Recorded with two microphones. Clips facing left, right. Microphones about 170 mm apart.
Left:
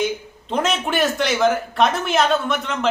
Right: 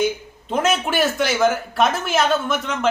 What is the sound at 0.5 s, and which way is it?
Speech, centre (ahead or behind).